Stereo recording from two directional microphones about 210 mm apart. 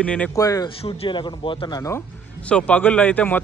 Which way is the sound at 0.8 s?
25° left (ahead or behind).